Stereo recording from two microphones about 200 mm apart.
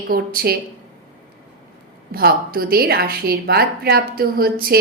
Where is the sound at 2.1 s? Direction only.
50° right (ahead or behind).